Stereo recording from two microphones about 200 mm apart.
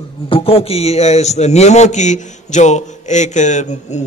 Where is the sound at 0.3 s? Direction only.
30° left (ahead or behind).